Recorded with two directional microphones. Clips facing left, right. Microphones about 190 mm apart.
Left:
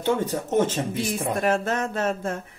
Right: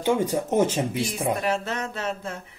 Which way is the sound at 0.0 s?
10° right (ahead or behind).